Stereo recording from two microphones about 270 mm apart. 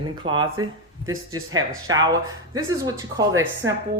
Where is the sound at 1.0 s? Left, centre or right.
Right.